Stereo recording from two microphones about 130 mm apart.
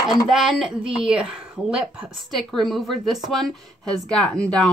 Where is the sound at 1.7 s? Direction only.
Centre (ahead or behind).